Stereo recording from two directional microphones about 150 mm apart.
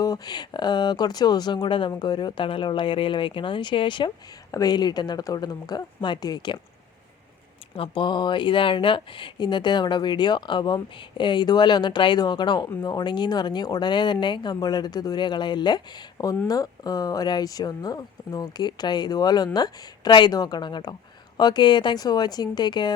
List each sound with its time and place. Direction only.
0.0 s speech: 25° left (ahead or behind)
7.8 s speech: 30° left (ahead or behind)